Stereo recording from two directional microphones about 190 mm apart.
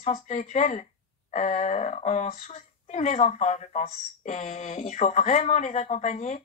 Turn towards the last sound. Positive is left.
turn(degrees=40)  # may be behind; listen again after turning